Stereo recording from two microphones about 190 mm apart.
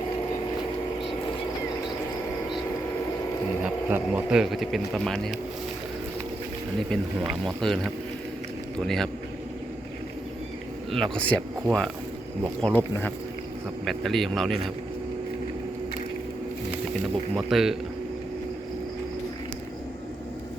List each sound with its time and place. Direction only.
3.8 s speech: 10° right (ahead or behind)
7.4 s speech: centre (ahead or behind)
8.8 s speech: 5° left (ahead or behind)
10.9 s speech: 5° left (ahead or behind)
13.8 s speech: centre (ahead or behind)
17.0 s speech: centre (ahead or behind)